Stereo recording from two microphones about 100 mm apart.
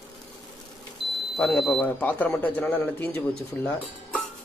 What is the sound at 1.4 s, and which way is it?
Speech, 10° left (ahead or behind).